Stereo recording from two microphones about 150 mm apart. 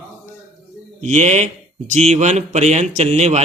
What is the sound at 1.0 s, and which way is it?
Speech, 50° right (ahead or behind).